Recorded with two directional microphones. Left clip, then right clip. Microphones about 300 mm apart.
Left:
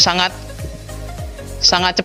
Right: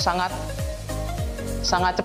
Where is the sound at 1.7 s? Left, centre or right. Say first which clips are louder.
Left 1 dB; left.